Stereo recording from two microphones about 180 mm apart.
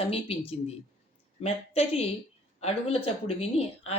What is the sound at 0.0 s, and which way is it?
Speech, 35° left (ahead or behind).